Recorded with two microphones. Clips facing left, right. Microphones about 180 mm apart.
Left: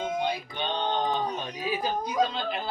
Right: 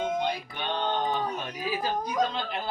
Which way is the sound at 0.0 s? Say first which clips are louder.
Even; 5° left (ahead or behind).